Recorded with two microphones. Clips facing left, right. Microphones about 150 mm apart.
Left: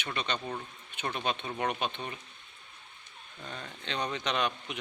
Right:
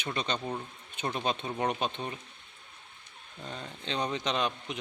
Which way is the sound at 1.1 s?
35° right (ahead or behind).